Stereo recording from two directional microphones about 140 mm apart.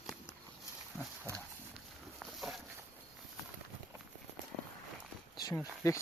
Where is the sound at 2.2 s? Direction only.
Centre (ahead or behind).